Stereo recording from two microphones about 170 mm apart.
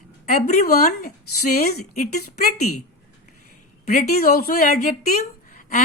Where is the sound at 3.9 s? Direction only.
45° left (ahead or behind).